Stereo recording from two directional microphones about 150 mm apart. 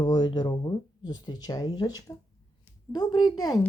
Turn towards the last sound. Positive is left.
turn(degrees=25)  # may be behind; listen again after turning